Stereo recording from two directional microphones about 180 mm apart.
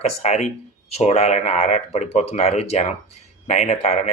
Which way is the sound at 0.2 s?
40° left (ahead or behind).